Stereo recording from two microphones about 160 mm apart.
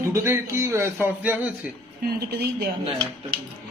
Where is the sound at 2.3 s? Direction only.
90° right.